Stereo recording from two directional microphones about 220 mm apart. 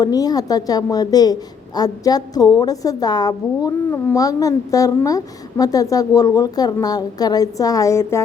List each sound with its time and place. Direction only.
0.0 s a woman's voice: 15° left (ahead or behind)